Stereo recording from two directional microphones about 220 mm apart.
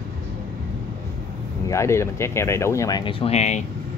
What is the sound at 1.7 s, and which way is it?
Speech, 15° left (ahead or behind).